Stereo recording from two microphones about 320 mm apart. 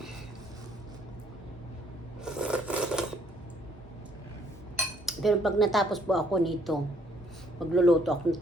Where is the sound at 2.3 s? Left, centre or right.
Centre.